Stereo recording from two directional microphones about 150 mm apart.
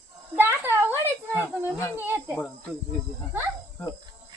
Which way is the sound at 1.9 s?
15° right (ahead or behind).